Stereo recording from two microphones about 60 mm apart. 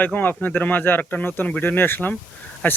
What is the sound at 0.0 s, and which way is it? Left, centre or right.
Speech, left.